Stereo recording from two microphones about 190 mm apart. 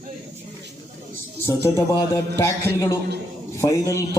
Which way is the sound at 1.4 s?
15° left (ahead or behind).